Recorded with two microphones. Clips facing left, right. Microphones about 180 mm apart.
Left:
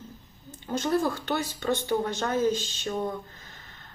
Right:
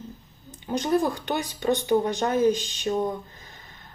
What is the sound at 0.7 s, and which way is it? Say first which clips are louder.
Speech: right 2 dB; 15° right (ahead or behind).